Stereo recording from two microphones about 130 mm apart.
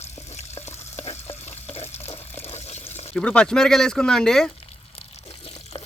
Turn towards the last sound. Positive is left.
turn(degrees=45)  # may be behind; listen again after turning